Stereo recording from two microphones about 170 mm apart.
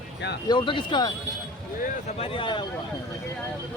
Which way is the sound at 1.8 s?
40° left (ahead or behind).